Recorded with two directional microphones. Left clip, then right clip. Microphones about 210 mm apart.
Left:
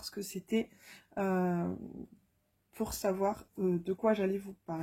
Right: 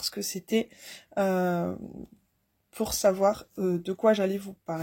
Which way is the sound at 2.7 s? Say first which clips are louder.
Right 9 dB; 40° right (ahead or behind).